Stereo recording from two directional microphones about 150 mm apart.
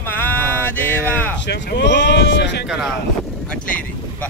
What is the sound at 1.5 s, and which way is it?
Speech, 90° left.